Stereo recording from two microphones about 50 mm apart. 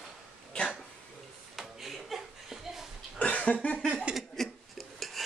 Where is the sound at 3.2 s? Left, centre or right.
Left.